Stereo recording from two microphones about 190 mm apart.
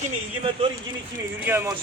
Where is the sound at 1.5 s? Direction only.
10° right (ahead or behind).